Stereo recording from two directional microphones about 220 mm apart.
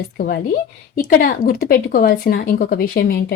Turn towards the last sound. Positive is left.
turn(degrees=45)  # may be behind; listen again after turning